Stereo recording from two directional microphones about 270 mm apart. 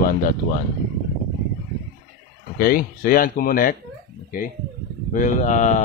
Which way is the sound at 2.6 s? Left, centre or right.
Left.